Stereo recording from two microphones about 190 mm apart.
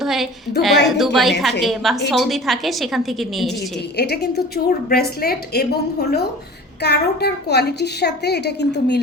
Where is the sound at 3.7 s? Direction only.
60° left (ahead or behind).